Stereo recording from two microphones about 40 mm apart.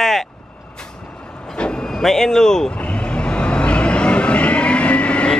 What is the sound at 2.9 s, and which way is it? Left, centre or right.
Vehicle, left.